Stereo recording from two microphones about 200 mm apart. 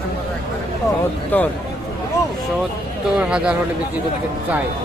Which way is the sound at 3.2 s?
5° right (ahead or behind).